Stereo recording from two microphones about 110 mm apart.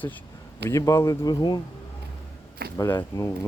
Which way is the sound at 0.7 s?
30° left (ahead or behind).